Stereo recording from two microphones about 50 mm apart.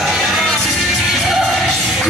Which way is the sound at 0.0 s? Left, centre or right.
Centre.